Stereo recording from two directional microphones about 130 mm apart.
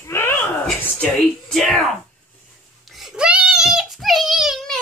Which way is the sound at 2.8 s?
Centre (ahead or behind).